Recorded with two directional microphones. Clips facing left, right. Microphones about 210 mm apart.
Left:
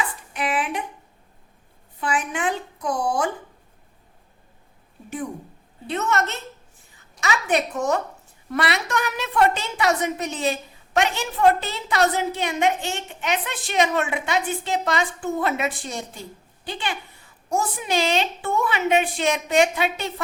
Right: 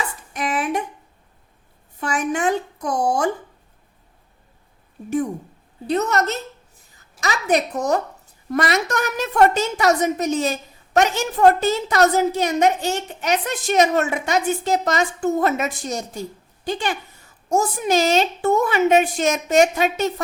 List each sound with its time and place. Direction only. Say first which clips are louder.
0.3 s a sound: right 2 dB; 45° right (ahead or behind)
2.0 s speech: right 3 dB; 45° right (ahead or behind)
5.9 s a woman's voice: right 4 dB; 40° right (ahead or behind)